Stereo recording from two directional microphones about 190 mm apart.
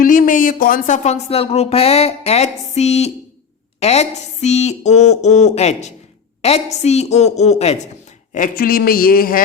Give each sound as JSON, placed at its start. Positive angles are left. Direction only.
{"t": 0.0, "sound": "speech", "side_deg": 45}
{"t": 8.3, "sound": "a woman's voice", "side_deg": 45}